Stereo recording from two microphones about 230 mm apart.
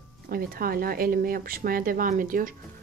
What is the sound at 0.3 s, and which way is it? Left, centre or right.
A woman's voice, right.